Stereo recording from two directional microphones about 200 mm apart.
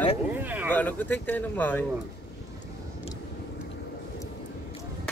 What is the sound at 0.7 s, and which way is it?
Speech, 10° left (ahead or behind).